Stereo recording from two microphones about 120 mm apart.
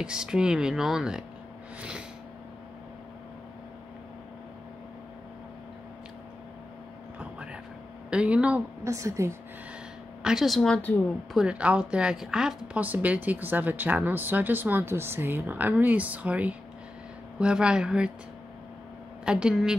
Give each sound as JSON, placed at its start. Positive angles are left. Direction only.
{"t": 0.0, "sound": "a woman's voice", "side_deg": -5}
{"t": 8.1, "sound": "a woman's voice", "side_deg": -10}
{"t": 8.8, "sound": "a woman's voice", "side_deg": -25}
{"t": 10.2, "sound": "speech", "side_deg": 0}
{"t": 11.3, "sound": "a woman's voice", "side_deg": -10}
{"t": 19.2, "sound": "a woman's voice", "side_deg": -5}